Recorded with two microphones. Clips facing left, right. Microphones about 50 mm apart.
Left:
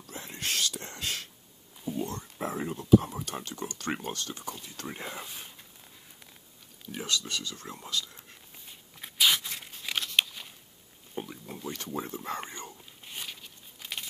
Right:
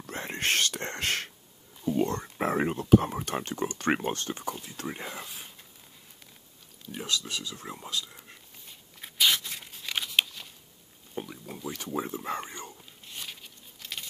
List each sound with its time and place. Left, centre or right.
0.1 s whispering: right
2.0 s a sound: right
2.2 s speech: right
4.6 s speech: centre
4.9 s speech: centre
6.9 s speech: centre
8.6 s a sound: centre
9.9 s scissors: centre
11.1 s speech: centre
12.4 s whispering: centre
13.0 s a sound: centre